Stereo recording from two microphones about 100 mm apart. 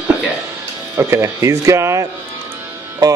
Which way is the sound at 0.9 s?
30° right (ahead or behind).